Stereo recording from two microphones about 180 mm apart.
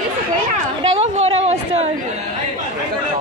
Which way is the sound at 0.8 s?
35° right (ahead or behind).